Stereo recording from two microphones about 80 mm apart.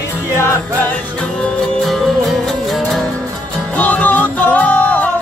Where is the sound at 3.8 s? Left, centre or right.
Centre.